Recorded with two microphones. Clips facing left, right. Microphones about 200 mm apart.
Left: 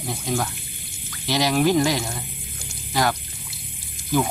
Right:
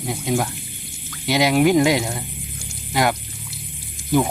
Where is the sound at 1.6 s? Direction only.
5° right (ahead or behind).